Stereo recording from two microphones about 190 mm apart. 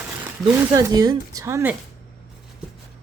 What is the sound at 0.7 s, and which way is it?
Speech, 20° right (ahead or behind).